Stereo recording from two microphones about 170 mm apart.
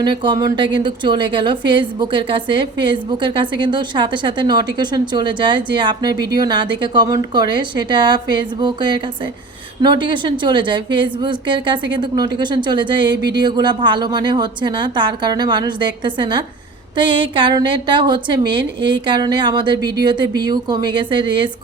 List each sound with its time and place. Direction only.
0.0 s a woman's voice: 25° right (ahead or behind)